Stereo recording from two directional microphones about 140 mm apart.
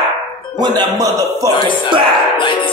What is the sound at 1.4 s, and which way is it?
Speech, 35° left (ahead or behind).